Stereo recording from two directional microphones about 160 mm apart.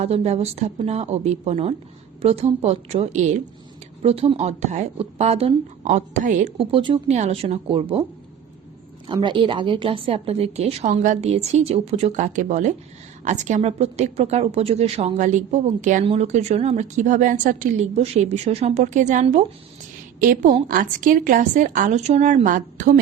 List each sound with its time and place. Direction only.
0.0 s a woman's voice: 40° right (ahead or behind)
4.0 s a woman's voice: 35° right (ahead or behind)
5.8 s a woman's voice: 50° right (ahead or behind)
6.6 s a woman's voice: 35° right (ahead or behind)
9.1 s a woman's voice: 30° right (ahead or behind); by 16.0 s 50° right (ahead or behind)
16.0 s a woman's voice: 40° right (ahead or behind)